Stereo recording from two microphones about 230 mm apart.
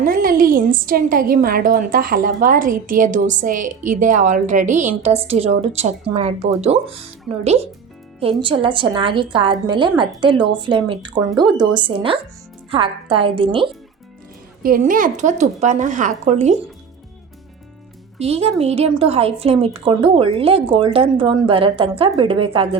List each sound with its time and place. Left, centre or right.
0.0 s a woman's voice: right
8.2 s a woman's voice: right
14.6 s a woman's voice: right
18.2 s a woman's voice: right